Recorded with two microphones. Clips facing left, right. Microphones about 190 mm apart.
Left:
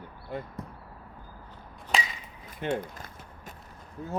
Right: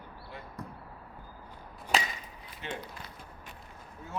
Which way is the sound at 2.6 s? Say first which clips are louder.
Left 10 dB; 50° left (ahead or behind).